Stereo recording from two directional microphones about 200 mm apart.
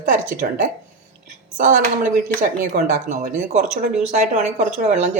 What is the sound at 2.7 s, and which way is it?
Speech, 40° right (ahead or behind).